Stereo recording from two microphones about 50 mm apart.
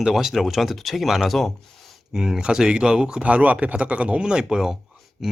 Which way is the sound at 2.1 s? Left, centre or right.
Centre.